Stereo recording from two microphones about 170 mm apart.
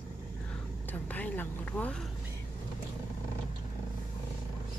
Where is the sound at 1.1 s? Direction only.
10° left (ahead or behind).